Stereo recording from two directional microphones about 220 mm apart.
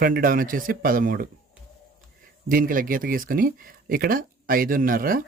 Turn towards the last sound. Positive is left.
turn(degrees=-40)  # may be behind; listen again after turning